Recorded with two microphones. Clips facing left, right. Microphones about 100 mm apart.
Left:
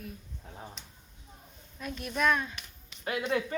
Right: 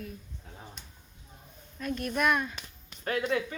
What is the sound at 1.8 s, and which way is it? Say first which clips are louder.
Speech: right 1 dB; 5° left (ahead or behind).